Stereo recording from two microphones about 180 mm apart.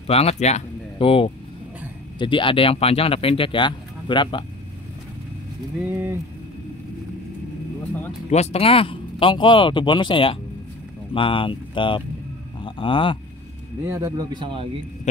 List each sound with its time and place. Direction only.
0.0 s speech: 35° left (ahead or behind)
5.9 s speech: 10° right (ahead or behind)
8.3 s speech: 35° left (ahead or behind)
13.8 s speech: 15° right (ahead or behind)